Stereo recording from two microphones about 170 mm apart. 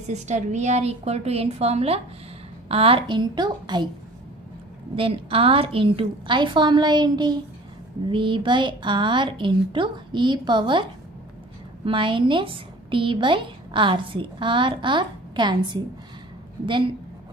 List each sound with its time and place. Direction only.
0.1 s a woman's voice: 45° right (ahead or behind); by 3.9 s 25° right (ahead or behind)
4.9 s a woman's voice: 35° right (ahead or behind)